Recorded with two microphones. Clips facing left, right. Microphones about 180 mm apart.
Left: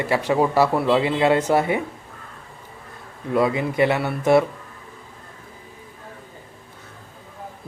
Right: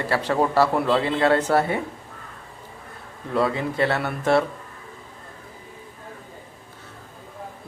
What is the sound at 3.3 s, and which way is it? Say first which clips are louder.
A man's voice: left 3 dB; 15° left (ahead or behind).